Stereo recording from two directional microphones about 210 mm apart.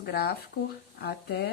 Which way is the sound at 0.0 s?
50° left (ahead or behind).